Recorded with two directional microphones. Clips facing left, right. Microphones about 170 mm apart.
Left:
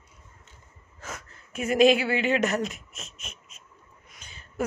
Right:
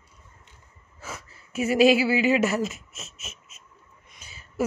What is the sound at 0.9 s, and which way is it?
Speech, 5° right (ahead or behind).